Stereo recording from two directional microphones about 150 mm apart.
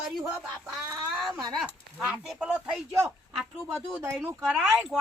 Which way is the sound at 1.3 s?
25° right (ahead or behind).